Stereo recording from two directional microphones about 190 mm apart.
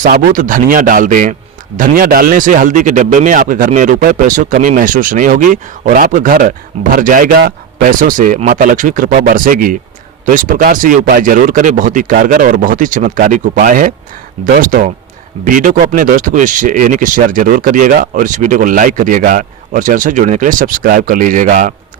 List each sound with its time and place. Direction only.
0.0 s a man's voice: 45° right (ahead or behind)